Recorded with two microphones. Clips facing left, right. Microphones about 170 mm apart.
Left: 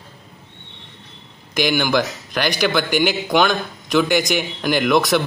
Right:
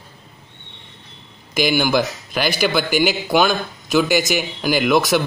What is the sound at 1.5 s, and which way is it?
A man's voice, 10° right (ahead or behind).